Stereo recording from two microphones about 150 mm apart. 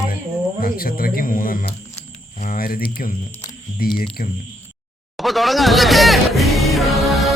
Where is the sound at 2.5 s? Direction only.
75° left (ahead or behind).